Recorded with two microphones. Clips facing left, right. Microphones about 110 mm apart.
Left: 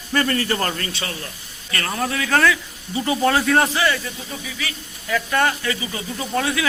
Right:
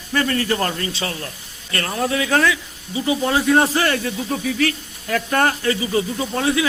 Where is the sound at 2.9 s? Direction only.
10° right (ahead or behind).